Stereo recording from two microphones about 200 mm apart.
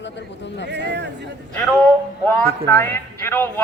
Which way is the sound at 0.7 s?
60° right (ahead or behind).